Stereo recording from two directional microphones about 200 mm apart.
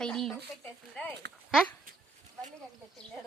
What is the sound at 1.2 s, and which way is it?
Speech, 55° right (ahead or behind).